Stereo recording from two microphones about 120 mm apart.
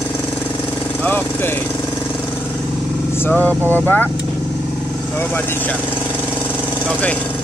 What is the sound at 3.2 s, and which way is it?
Speech, 15° left (ahead or behind).